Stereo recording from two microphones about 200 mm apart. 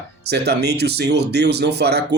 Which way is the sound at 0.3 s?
55° right (ahead or behind).